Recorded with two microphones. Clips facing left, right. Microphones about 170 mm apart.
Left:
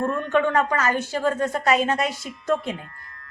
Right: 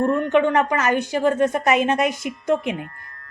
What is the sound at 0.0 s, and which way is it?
A woman's voice, 20° right (ahead or behind).